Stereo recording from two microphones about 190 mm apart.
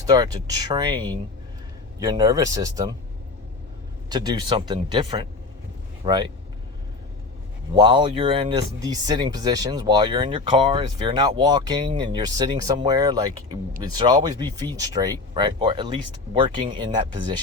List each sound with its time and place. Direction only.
0.0 s speech: 20° right (ahead or behind)
4.1 s speech: 20° right (ahead or behind)
7.7 s speech: 25° right (ahead or behind)